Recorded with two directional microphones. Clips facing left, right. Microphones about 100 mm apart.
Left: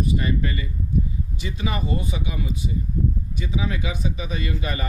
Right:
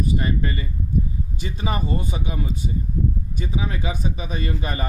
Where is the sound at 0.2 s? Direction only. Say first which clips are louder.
Even; 35° right (ahead or behind).